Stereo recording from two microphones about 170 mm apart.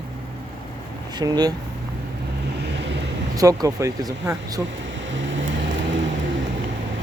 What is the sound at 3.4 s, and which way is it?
Speech, 20° right (ahead or behind).